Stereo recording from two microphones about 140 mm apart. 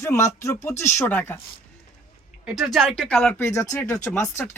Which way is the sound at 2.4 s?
5° right (ahead or behind).